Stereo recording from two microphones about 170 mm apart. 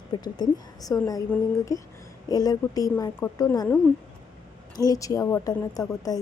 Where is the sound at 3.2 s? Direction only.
10° left (ahead or behind).